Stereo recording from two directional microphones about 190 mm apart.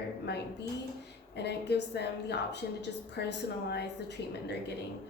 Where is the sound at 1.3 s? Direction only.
60° left (ahead or behind).